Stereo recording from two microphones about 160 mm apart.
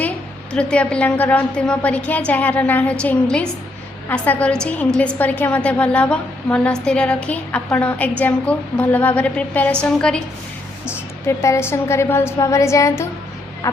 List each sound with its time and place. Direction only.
0.5 s a woman's voice: 5° left (ahead or behind)
10.8 s a woman's voice: 15° left (ahead or behind)